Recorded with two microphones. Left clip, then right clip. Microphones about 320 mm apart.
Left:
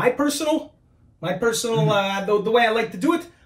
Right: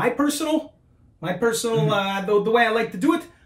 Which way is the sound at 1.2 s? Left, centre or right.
Centre.